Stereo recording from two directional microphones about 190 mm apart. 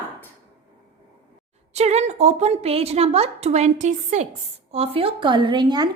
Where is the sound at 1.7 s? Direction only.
35° right (ahead or behind).